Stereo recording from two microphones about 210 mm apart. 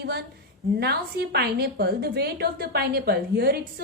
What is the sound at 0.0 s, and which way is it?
A woman's voice, 50° right (ahead or behind).